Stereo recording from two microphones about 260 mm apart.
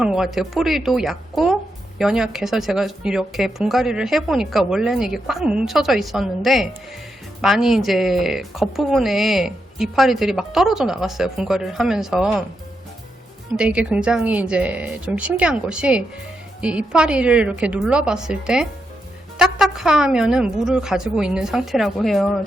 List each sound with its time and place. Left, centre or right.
0.0 s a woman's voice: centre
13.6 s a woman's voice: centre